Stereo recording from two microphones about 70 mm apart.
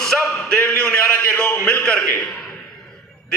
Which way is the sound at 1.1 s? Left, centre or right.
Left.